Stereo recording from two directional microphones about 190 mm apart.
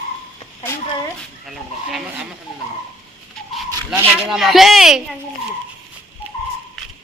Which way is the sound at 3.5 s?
5° right (ahead or behind).